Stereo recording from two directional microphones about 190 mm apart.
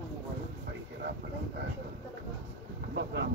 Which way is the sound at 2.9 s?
60° right (ahead or behind).